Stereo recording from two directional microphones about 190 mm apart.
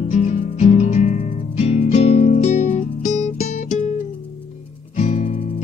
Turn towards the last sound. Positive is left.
turn(degrees=40)  # may be behind; listen again after turning